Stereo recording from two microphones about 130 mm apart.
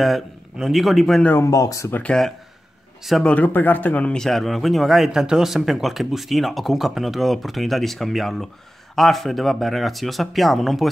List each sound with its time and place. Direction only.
0.0 s speech: centre (ahead or behind)
1.3 s speech: 25° left (ahead or behind)
2.0 s speech: 5° left (ahead or behind)